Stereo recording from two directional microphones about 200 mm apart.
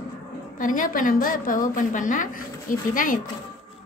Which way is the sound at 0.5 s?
40° left (ahead or behind).